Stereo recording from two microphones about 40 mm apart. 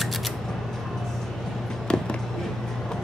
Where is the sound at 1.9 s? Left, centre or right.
Left.